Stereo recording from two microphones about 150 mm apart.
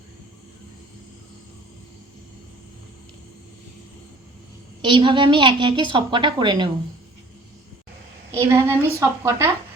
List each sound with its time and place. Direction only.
4.8 s a woman's voice: 35° right (ahead or behind)
8.3 s a woman's voice: 20° right (ahead or behind)